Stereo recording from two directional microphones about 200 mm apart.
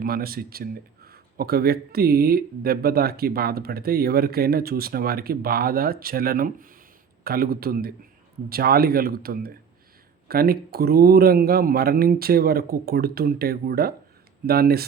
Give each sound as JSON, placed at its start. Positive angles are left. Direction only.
{"t": 0.0, "sound": "speech", "side_deg": -50}